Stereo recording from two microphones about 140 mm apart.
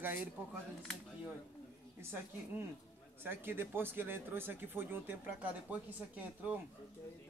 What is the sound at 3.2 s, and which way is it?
Speech, 15° right (ahead or behind).